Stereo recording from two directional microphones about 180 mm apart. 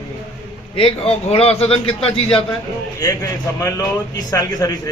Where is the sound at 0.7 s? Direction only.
30° left (ahead or behind).